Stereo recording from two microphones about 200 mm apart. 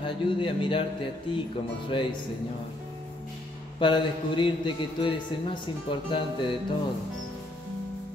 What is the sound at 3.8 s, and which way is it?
A man's voice, 25° left (ahead or behind).